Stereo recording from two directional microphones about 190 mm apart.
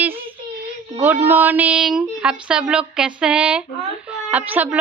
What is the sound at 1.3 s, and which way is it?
A woman's voice, 10° right (ahead or behind).